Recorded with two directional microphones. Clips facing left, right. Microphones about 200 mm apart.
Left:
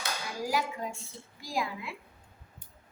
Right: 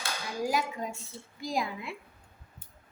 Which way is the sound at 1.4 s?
20° right (ahead or behind).